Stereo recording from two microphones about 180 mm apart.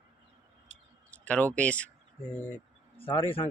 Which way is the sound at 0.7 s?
90° left.